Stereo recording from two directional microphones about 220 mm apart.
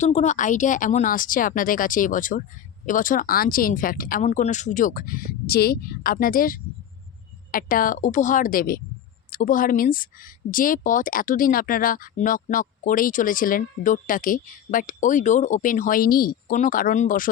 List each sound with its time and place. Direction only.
0.0 s speech: 30° left (ahead or behind)